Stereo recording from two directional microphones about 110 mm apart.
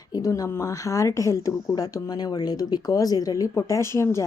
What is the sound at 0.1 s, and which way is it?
A woman's voice, 30° left (ahead or behind).